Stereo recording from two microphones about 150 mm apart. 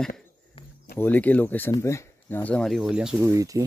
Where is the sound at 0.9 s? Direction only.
10° left (ahead or behind); by 3.2 s 5° right (ahead or behind).